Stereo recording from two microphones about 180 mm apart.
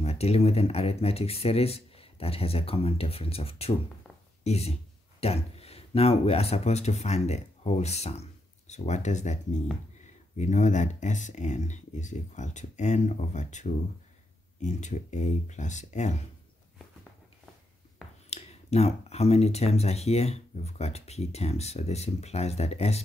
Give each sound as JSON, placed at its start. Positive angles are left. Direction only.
{"t": 0.0, "sound": "speech", "side_deg": 35}
{"t": 18.3, "sound": "speech", "side_deg": 35}